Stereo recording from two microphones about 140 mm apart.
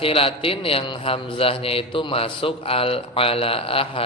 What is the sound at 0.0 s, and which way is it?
A man's voice, 40° left (ahead or behind).